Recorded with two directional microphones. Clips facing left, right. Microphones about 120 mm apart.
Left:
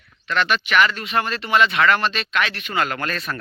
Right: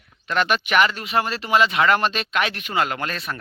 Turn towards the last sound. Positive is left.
turn(degrees=-20)  # may be behind; listen again after turning